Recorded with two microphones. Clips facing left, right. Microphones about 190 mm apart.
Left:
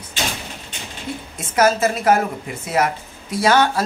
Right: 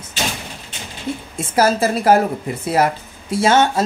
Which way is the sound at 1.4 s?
30° right (ahead or behind).